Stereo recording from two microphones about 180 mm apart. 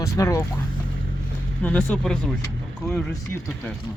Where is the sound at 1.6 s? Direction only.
10° left (ahead or behind).